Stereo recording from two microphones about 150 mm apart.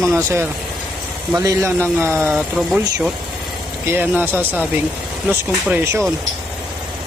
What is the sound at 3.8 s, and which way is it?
A man's voice, 15° right (ahead or behind).